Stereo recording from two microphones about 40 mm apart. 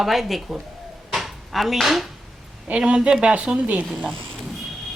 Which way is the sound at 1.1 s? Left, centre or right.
Centre.